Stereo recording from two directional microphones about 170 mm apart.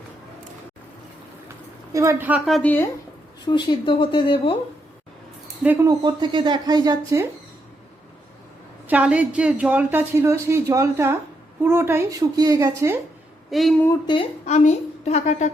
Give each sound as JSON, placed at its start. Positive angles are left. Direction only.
{"t": 1.9, "sound": "a woman's voice", "side_deg": -15}
{"t": 3.4, "sound": "speech", "side_deg": 25}
{"t": 5.6, "sound": "a woman's voice", "side_deg": -10}
{"t": 5.9, "sound": "speech", "side_deg": -25}
{"t": 8.9, "sound": "a woman's voice", "side_deg": -10}
{"t": 13.5, "sound": "a woman's voice", "side_deg": 0}
{"t": 14.4, "sound": "a woman's voice", "side_deg": 45}